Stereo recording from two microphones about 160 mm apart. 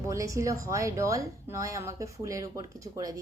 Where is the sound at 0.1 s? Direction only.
20° right (ahead or behind).